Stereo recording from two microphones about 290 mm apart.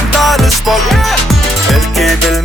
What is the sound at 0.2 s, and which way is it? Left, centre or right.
Music, centre.